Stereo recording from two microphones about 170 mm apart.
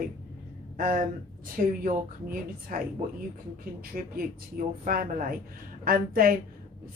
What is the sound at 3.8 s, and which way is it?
Speech, 60° right (ahead or behind).